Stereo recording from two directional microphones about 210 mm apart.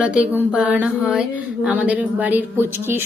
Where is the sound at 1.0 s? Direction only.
5° right (ahead or behind).